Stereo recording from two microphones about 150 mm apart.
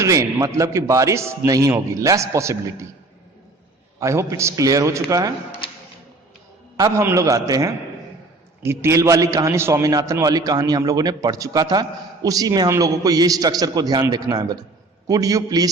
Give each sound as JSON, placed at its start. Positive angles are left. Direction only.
{"t": 0.0, "sound": "a man's voice", "side_deg": -20}
{"t": 4.0, "sound": "a man's voice", "side_deg": -20}
{"t": 6.7, "sound": "a man's voice", "side_deg": -20}